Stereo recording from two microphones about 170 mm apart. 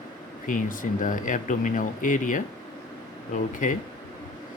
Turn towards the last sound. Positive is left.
turn(degrees=50)  # may be behind; listen again after turning